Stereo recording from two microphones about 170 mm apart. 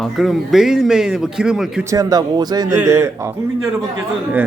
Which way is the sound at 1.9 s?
20° right (ahead or behind).